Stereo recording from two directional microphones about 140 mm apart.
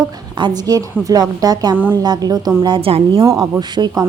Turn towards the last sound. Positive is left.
turn(degrees=-30)  # may be behind; listen again after turning